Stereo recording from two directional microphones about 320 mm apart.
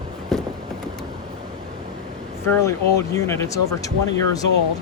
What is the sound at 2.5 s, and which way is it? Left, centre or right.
Speech, centre.